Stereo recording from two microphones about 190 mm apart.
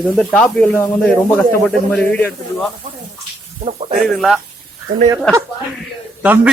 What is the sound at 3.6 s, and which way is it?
Speech, 30° right (ahead or behind).